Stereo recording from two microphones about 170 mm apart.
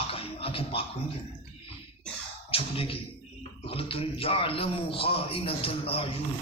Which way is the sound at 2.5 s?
35° left (ahead or behind).